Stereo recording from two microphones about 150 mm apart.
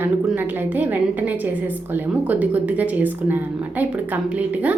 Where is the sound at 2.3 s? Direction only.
10° right (ahead or behind).